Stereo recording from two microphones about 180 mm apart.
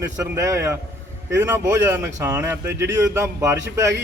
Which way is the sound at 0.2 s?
15° right (ahead or behind).